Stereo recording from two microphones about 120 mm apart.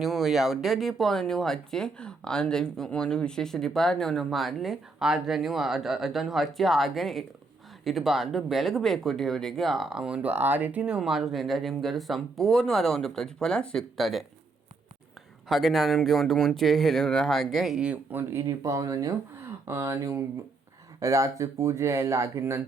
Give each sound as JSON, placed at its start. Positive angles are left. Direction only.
{"t": 0.0, "sound": "speech", "side_deg": 0}
{"t": 15.4, "sound": "speech", "side_deg": 0}